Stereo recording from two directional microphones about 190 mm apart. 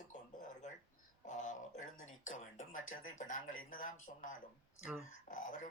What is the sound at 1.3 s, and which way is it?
Speech, 40° left (ahead or behind).